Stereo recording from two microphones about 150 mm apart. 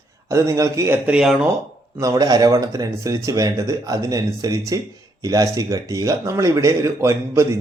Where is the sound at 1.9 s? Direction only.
25° right (ahead or behind).